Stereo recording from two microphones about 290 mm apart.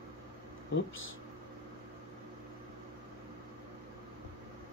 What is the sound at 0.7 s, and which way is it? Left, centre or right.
Speech, left.